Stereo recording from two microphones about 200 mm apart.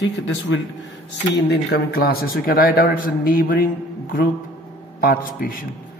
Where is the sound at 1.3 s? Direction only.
55° left (ahead or behind).